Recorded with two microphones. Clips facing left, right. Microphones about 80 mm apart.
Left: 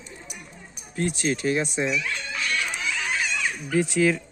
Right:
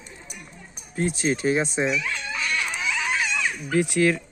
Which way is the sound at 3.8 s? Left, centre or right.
Centre.